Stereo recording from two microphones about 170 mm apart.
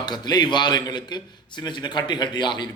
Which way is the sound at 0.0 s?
25° left (ahead or behind).